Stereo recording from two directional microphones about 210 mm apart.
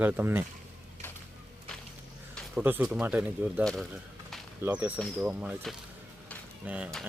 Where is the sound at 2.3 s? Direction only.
5° right (ahead or behind).